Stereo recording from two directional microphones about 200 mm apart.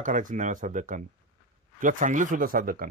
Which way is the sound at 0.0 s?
40° right (ahead or behind).